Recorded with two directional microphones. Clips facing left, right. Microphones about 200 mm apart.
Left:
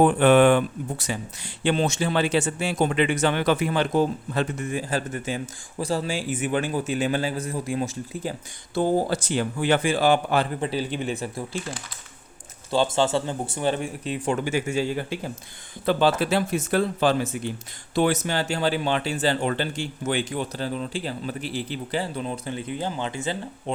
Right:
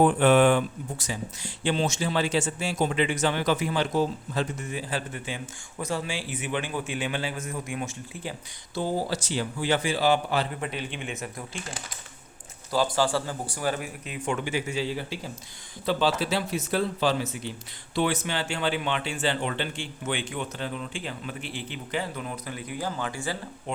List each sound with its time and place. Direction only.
0.0 s a man's voice: 65° left (ahead or behind)
10.6 s speech: 35° left (ahead or behind)
12.7 s a man's voice: 25° left (ahead or behind)